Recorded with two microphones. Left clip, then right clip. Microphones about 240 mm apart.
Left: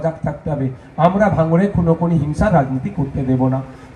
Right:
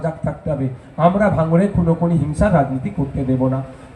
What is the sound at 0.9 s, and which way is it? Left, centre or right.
Speech, left.